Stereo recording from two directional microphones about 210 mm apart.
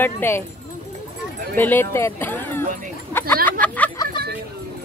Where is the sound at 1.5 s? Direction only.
10° left (ahead or behind).